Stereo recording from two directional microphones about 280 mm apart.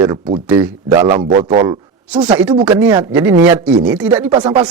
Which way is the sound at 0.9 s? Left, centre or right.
Centre.